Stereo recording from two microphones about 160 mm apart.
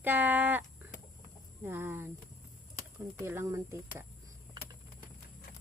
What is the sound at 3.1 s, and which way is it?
Speech, 15° right (ahead or behind).